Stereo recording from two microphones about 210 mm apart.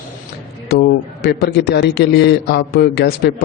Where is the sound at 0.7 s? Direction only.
50° left (ahead or behind).